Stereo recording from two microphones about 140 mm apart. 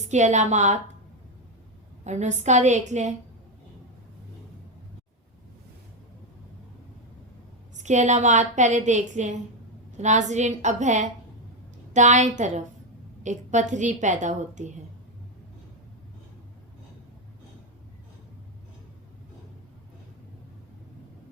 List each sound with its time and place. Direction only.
0.0 s a woman's voice: 55° right (ahead or behind)
2.0 s a woman's voice: 55° right (ahead or behind)
7.8 s a woman's voice: 60° right (ahead or behind)